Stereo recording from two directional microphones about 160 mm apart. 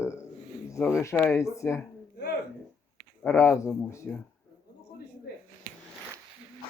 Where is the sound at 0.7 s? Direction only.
15° left (ahead or behind).